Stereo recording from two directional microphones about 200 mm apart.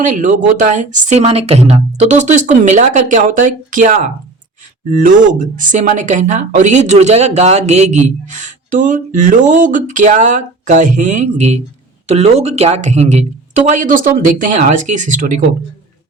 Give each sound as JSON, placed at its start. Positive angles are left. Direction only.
{"t": 0.0, "sound": "speech", "side_deg": -40}